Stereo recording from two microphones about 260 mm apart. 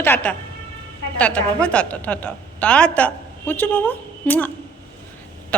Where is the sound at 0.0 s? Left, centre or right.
Centre.